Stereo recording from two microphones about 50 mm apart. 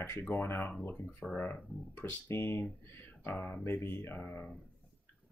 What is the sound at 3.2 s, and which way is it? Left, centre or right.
Speech, left.